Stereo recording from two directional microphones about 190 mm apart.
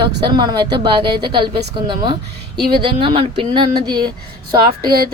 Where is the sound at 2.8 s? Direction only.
25° right (ahead or behind).